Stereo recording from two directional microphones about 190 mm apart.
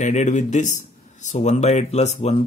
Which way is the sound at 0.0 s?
40° left (ahead or behind).